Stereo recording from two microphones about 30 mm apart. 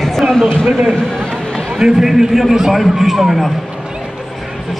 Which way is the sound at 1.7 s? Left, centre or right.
Centre.